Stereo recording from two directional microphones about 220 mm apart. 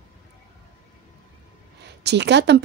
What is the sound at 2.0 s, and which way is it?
Speech, 50° right (ahead or behind).